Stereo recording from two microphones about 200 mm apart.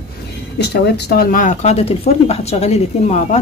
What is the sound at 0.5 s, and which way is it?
A woman's voice, 55° left (ahead or behind).